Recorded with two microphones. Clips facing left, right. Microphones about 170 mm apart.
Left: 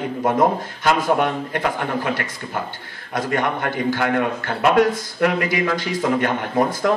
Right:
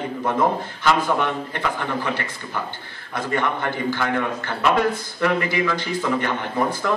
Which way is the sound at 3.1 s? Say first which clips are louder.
Left 2 dB; 45° left (ahead or behind).